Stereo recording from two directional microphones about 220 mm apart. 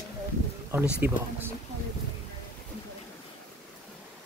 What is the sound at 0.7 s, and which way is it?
Speech, 10° right (ahead or behind).